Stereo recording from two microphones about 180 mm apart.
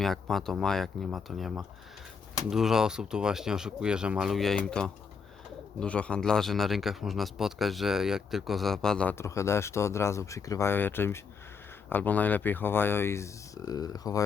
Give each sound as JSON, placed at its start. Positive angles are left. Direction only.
{"t": 0.0, "sound": "a man's voice", "side_deg": 0}